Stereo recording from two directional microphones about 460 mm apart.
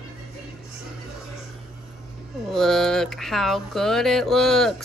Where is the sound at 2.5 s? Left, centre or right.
Centre.